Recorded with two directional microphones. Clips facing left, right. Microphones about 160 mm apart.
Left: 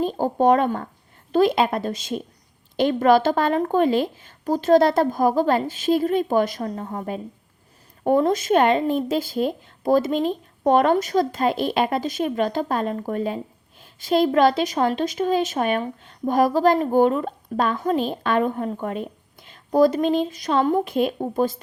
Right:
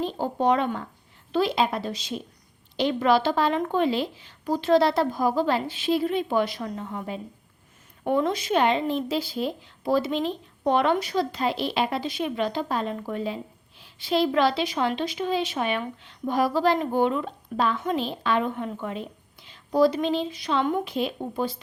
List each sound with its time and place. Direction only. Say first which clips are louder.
0.0 s speech: left 5 dB; 45° left (ahead or behind)
20.9 s speech: left 6 dB; 50° left (ahead or behind)